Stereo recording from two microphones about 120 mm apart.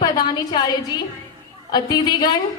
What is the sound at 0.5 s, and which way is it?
A woman's voice, 35° left (ahead or behind).